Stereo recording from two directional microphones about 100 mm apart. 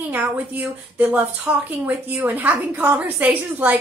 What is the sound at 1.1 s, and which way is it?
A woman's voice, 15° right (ahead or behind).